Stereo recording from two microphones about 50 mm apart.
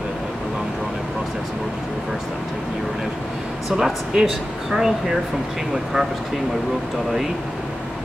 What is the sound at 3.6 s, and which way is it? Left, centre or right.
Speech, centre.